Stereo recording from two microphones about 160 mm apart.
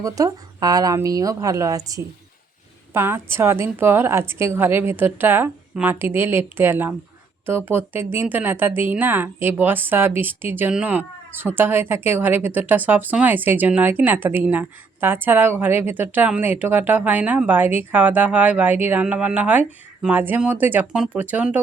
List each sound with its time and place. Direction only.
0.0 s a woman's voice: 20° right (ahead or behind)